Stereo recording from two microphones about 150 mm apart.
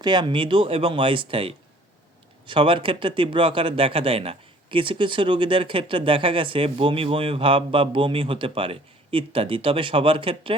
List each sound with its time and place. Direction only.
0.0 s speech: 30° right (ahead or behind)